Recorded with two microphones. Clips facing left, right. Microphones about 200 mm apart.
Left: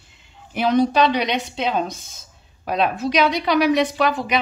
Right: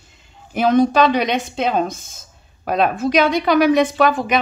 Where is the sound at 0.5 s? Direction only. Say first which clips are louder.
Right 3 dB; 50° right (ahead or behind).